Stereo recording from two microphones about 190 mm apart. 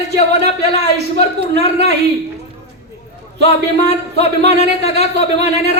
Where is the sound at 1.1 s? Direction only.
35° left (ahead or behind).